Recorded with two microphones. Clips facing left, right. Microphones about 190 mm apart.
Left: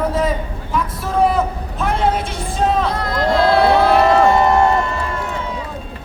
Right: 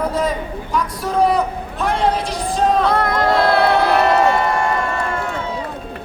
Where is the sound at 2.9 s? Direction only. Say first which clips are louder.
Right 1 dB; 60° right (ahead or behind).